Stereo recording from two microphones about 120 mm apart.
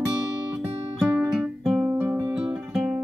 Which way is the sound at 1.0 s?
10° right (ahead or behind).